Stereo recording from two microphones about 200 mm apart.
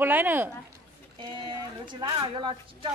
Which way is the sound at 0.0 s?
10° right (ahead or behind).